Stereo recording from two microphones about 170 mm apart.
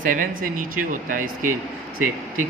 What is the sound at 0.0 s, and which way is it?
Speech, 50° right (ahead or behind).